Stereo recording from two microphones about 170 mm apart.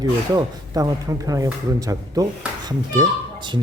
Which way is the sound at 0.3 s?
20° right (ahead or behind).